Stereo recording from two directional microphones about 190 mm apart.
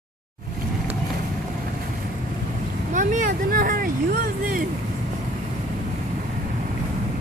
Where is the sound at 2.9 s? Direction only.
40° right (ahead or behind).